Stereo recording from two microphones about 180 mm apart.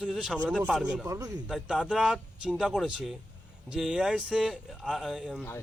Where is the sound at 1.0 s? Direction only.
20° right (ahead or behind).